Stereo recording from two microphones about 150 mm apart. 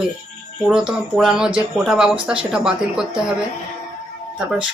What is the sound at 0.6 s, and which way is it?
Speech, 5° right (ahead or behind).